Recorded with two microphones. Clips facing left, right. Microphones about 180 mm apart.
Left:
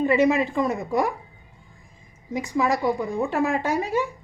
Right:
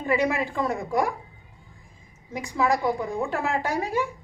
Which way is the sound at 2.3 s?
20° left (ahead or behind).